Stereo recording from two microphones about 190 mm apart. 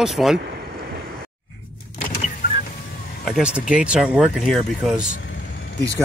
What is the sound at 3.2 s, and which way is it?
Speech, 5° right (ahead or behind).